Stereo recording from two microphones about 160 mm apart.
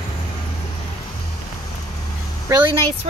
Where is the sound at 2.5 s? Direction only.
30° right (ahead or behind).